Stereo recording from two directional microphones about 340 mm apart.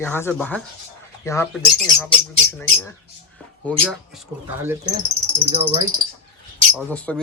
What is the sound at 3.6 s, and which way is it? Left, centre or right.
Speech, centre.